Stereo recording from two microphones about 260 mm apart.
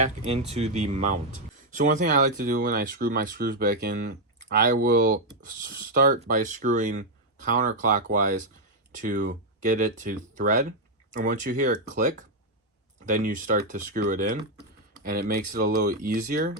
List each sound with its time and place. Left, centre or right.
0.0 s speech: right